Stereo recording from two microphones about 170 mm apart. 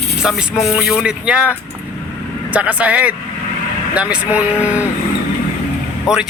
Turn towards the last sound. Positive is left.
turn(degrees=-5)  # may be behind; listen again after turning